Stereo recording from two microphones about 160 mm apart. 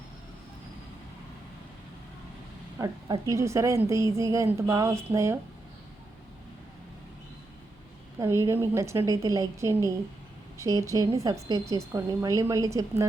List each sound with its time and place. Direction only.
3.1 s speech: 20° right (ahead or behind)
8.2 s a woman's voice: 15° right (ahead or behind)